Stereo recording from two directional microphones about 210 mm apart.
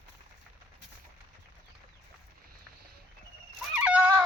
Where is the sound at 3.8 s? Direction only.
5° right (ahead or behind).